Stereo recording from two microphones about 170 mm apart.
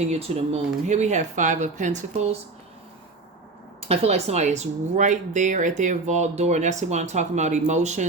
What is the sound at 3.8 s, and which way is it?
Speech, 40° right (ahead or behind).